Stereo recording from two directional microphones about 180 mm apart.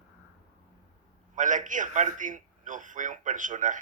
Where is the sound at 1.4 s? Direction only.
45° right (ahead or behind).